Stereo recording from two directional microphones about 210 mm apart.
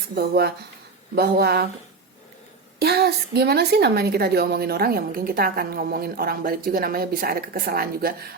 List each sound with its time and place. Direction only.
0.2 s a woman's voice: 50° right (ahead or behind)
2.7 s a woman's voice: 50° right (ahead or behind)